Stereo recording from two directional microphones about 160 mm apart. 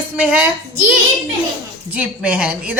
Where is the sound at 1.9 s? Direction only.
10° right (ahead or behind).